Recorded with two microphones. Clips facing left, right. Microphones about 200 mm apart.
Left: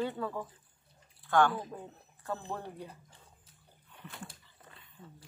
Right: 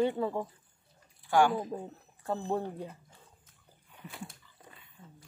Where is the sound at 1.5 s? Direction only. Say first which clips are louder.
Right 5 dB; 30° right (ahead or behind).